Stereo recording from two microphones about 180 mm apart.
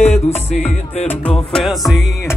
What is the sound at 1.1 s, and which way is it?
Speech, 5° left (ahead or behind).